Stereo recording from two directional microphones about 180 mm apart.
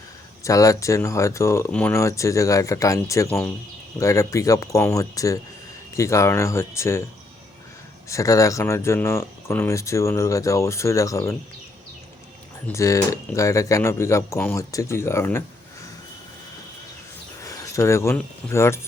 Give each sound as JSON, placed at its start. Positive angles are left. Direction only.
{"t": 0.4, "sound": "speech", "side_deg": 20}
{"t": 8.1, "sound": "speech", "side_deg": 20}
{"t": 12.6, "sound": "speech", "side_deg": 15}
{"t": 17.4, "sound": "speech", "side_deg": 20}